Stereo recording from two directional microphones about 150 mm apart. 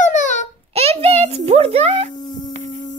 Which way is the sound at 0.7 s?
40° right (ahead or behind).